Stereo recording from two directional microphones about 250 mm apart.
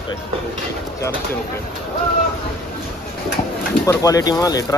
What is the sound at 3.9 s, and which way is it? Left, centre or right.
Speech, centre.